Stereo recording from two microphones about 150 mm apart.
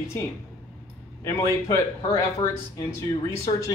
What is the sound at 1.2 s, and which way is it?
Speech, 20° left (ahead or behind).